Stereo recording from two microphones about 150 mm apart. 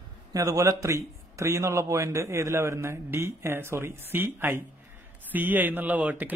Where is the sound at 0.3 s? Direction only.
20° right (ahead or behind).